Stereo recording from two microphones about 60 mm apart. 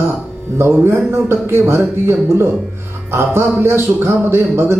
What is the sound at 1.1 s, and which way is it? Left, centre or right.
Speech, right.